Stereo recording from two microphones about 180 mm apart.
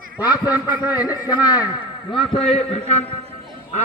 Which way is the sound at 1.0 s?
20° left (ahead or behind).